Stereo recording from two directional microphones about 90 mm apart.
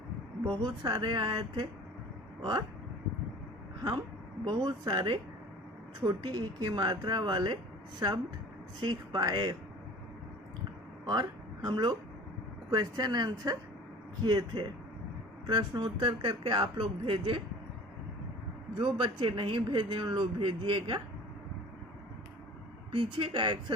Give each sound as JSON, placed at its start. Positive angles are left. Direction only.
{"t": 0.4, "sound": "speech", "side_deg": -50}
{"t": 0.9, "sound": "speech", "side_deg": -60}
{"t": 4.4, "sound": "speech", "side_deg": -50}
{"t": 11.0, "sound": "speech", "side_deg": -50}
{"t": 15.8, "sound": "speech", "side_deg": -60}
{"t": 18.8, "sound": "speech", "side_deg": -65}
{"t": 22.9, "sound": "speech", "side_deg": -70}